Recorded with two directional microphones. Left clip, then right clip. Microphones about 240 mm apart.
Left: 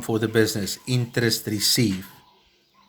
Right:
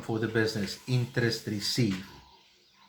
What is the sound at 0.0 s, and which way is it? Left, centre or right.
Speech, left.